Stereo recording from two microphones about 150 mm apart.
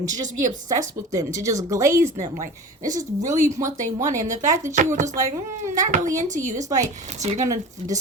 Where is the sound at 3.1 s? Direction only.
55° right (ahead or behind).